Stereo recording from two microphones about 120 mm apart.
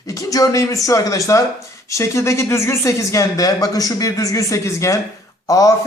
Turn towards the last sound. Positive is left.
turn(degrees=30)  # may be behind; listen again after turning